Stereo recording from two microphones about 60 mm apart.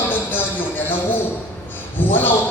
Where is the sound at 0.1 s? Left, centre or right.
Left.